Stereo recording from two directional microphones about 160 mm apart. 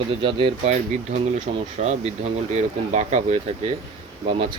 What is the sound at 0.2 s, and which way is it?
Speech, 30° right (ahead or behind).